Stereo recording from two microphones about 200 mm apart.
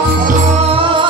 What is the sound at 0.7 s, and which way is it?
Music, 25° right (ahead or behind).